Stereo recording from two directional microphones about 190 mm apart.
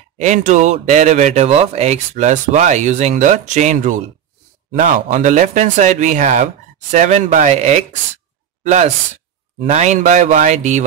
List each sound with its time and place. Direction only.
0.2 s a man's voice: 40° right (ahead or behind)